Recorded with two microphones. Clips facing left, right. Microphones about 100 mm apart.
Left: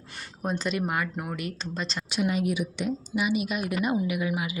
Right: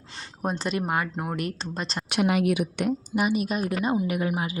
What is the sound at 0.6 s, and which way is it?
Speech, 35° right (ahead or behind).